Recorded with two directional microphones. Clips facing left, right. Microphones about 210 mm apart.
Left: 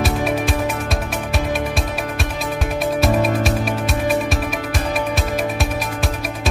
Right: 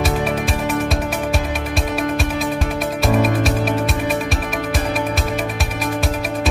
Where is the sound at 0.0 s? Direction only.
Centre (ahead or behind).